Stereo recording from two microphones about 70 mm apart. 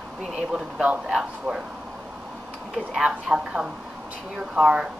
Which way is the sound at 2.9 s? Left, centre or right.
Centre.